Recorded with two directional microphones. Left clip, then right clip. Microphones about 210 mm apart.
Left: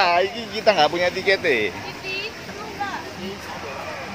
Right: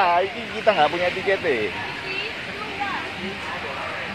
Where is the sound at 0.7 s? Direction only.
35° left (ahead or behind).